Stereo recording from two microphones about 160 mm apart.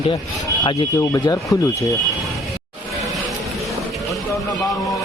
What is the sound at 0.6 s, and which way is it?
Speech, 30° left (ahead or behind).